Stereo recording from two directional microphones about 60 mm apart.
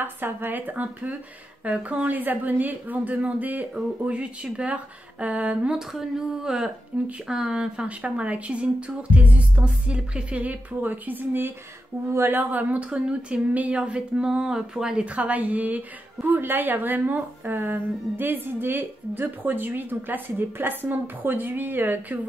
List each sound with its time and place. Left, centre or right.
0.0 s speech: right
5.8 s speech: centre
6.9 s speech: right
7.2 s speech: centre; by 22.2 s right